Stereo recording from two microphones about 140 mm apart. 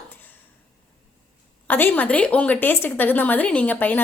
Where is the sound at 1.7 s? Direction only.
10° left (ahead or behind).